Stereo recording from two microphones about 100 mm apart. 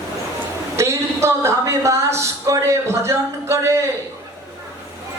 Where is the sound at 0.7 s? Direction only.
30° right (ahead or behind).